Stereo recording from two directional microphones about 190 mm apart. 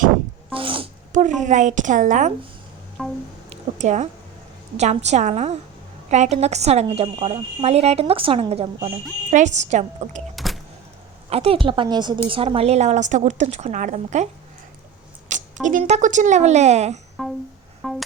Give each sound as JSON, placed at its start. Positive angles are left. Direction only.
{"t": 0.5, "sound": "sneeze", "side_deg": -30}
{"t": 1.1, "sound": "a woman's voice", "side_deg": -40}
{"t": 3.0, "sound": "music", "side_deg": 5}
{"t": 3.5, "sound": "a sound", "side_deg": -35}
{"t": 4.8, "sound": "a woman's voice", "side_deg": -35}
{"t": 10.3, "sound": "music", "side_deg": 0}
{"t": 11.3, "sound": "a woman's voice", "side_deg": -30}
{"t": 15.3, "sound": "a woman's voice", "side_deg": -40}
{"t": 17.2, "sound": "music", "side_deg": 0}